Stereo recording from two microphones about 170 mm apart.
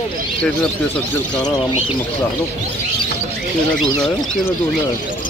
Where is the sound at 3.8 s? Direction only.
5° left (ahead or behind).